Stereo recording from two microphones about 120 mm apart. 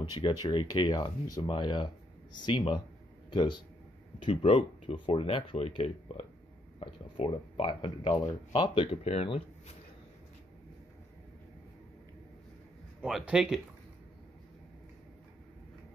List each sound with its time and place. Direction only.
0.3 s speech: 35° left (ahead or behind)
4.2 s speech: 55° left (ahead or behind)
13.0 s speech: 5° right (ahead or behind)